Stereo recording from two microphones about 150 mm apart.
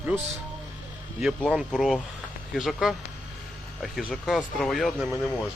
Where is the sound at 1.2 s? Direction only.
5° right (ahead or behind).